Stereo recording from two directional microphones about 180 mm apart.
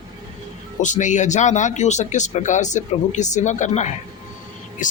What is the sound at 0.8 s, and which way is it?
A man's voice, 45° left (ahead or behind).